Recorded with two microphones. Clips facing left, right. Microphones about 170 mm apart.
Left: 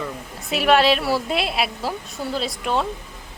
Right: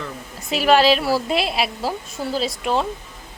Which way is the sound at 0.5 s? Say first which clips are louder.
Right 1 dB; centre (ahead or behind).